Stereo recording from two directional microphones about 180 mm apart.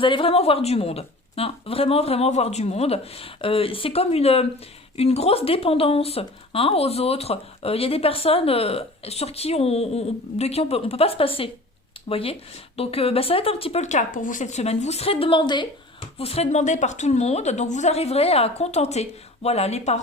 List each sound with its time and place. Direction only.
0.0 s speech: 30° left (ahead or behind)